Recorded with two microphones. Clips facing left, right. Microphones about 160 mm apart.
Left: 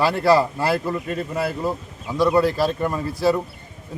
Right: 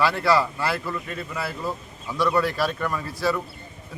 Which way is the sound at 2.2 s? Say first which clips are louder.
Left 5 dB; 30° left (ahead or behind).